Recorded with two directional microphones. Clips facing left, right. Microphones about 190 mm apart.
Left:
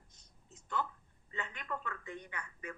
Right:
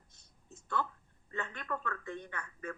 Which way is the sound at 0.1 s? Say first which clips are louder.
Right 7 dB; 15° left (ahead or behind).